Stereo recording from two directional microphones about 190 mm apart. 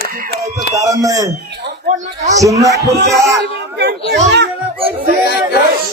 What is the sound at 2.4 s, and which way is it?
Music, 15° right (ahead or behind).